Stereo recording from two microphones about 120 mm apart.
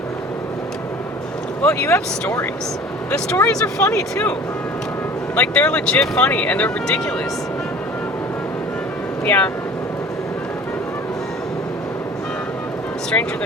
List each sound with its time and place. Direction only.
1.6 s speech: 25° left (ahead or behind)
5.3 s speech: 10° left (ahead or behind)
9.2 s speech: 15° left (ahead or behind)